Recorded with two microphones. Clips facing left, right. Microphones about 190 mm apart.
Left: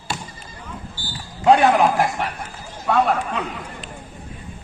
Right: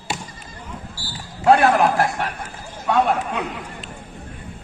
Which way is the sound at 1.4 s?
15° left (ahead or behind).